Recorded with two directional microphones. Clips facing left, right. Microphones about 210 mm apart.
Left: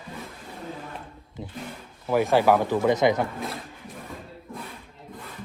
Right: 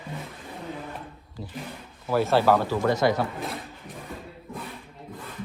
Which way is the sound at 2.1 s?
15° left (ahead or behind).